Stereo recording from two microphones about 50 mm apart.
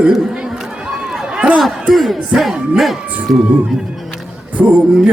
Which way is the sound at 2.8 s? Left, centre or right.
Centre.